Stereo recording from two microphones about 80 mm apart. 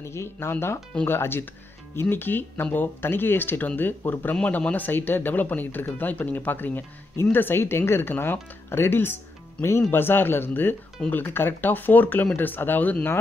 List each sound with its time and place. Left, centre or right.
0.0 s speech: left